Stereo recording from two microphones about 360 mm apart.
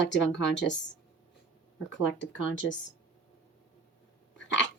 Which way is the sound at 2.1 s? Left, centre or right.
Left.